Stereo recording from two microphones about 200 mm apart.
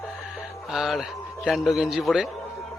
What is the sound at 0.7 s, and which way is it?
Speech, centre (ahead or behind).